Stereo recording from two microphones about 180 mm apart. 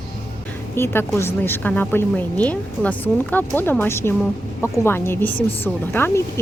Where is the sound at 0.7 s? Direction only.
10° left (ahead or behind).